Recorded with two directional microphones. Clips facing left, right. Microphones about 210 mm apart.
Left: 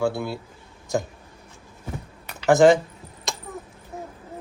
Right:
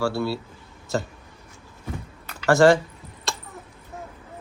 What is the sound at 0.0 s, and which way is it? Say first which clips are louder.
Speech: even; 15° left (ahead or behind).